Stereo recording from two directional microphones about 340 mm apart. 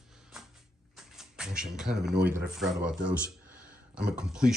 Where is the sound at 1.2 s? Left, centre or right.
Centre.